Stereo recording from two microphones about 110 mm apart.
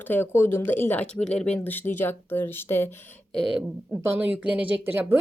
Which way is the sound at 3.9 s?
20° right (ahead or behind).